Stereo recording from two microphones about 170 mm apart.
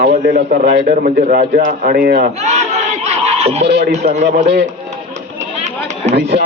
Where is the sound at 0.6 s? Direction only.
75° right (ahead or behind); by 2.0 s 50° right (ahead or behind).